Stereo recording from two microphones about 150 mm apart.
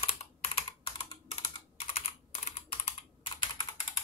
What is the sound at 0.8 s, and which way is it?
Computer keyboard, 30° left (ahead or behind).